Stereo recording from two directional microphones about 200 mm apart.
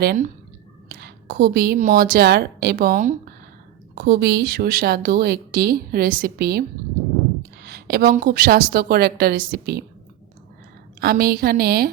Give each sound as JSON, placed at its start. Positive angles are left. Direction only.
{"t": 0.0, "sound": "a woman's voice", "side_deg": -50}
{"t": 11.0, "sound": "a woman's voice", "side_deg": -50}